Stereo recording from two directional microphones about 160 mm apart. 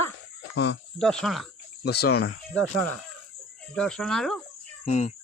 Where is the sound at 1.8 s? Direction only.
90° left.